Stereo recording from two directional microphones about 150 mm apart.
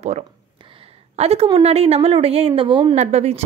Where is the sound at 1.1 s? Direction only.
45° right (ahead or behind).